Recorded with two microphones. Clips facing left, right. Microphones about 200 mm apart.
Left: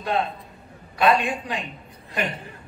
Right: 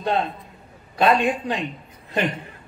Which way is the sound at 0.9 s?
30° right (ahead or behind).